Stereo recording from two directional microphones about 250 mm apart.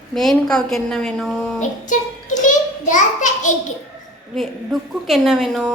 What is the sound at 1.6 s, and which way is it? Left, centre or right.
A child's voice, left.